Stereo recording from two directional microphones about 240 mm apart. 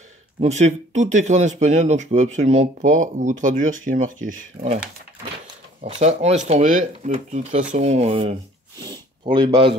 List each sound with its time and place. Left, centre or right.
0.4 s speech: right
5.9 s speech: right